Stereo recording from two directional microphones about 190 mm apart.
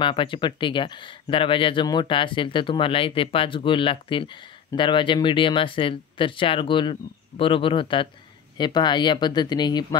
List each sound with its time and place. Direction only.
0.0 s speech: 25° left (ahead or behind)